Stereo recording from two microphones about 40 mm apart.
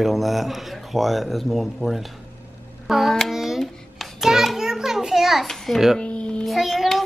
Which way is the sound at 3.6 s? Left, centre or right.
Centre.